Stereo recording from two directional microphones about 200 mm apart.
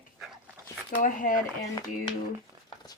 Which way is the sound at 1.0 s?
40° left (ahead or behind).